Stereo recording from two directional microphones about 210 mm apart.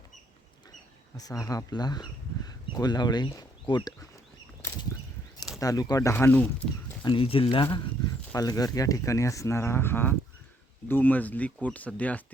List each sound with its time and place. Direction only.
1.1 s speech: 15° left (ahead or behind)
5.5 s speech: 15° left (ahead or behind)
7.0 s speech: 25° left (ahead or behind); by 12.2 s 5° left (ahead or behind)